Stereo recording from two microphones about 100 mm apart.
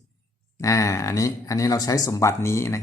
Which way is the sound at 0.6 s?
30° left (ahead or behind).